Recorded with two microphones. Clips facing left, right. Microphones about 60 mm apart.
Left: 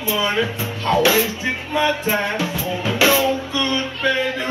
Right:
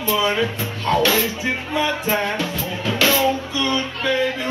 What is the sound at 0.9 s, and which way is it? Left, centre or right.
Music, centre.